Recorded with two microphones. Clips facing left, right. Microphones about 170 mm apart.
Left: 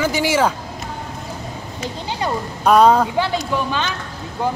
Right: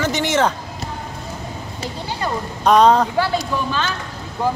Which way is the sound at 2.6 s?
5° left (ahead or behind).